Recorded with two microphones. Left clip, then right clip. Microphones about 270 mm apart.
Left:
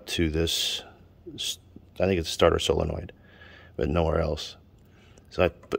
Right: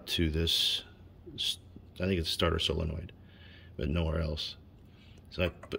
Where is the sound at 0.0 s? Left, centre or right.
Centre.